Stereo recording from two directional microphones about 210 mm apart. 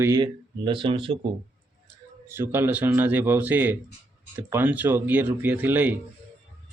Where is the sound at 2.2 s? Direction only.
10° right (ahead or behind).